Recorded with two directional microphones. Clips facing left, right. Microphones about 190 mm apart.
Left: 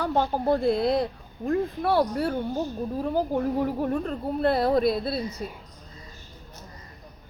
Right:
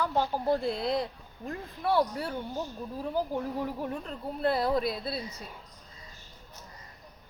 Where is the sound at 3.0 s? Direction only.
60° left (ahead or behind).